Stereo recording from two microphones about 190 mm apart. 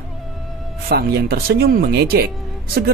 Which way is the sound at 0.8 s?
60° right (ahead or behind).